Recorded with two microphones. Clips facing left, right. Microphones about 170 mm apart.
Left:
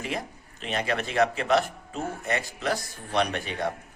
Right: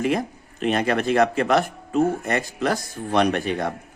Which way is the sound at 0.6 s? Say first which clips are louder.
Right 8 dB; 50° right (ahead or behind).